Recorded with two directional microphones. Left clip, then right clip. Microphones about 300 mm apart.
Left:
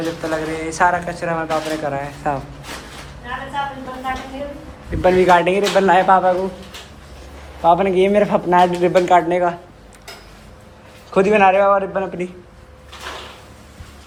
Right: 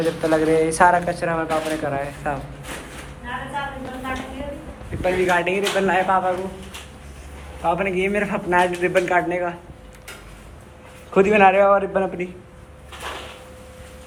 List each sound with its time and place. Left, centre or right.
0.0 s speech: centre
5.0 s a man's voice: left
7.6 s a man's voice: left
11.1 s speech: centre